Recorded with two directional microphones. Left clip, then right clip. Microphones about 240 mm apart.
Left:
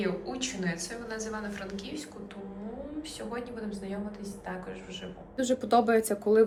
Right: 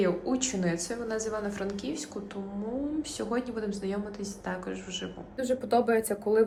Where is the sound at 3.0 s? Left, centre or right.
Right.